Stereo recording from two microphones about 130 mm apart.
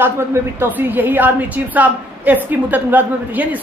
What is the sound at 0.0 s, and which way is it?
A woman's voice, 15° right (ahead or behind).